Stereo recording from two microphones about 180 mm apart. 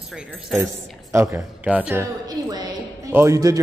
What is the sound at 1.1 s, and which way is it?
A woman's voice, 15° right (ahead or behind).